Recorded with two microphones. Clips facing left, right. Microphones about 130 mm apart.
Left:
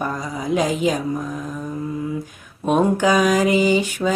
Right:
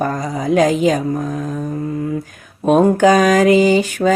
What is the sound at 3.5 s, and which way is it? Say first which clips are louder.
Mantra: right 6 dB; 5° left (ahead or behind).